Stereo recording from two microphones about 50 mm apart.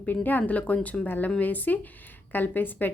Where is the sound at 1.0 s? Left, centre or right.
Left.